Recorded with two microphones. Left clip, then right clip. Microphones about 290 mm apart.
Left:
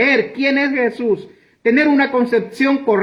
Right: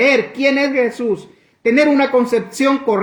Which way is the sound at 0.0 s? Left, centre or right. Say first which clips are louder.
Right 2 dB; centre.